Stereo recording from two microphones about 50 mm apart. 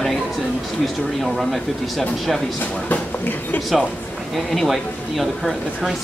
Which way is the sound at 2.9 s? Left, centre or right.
Left.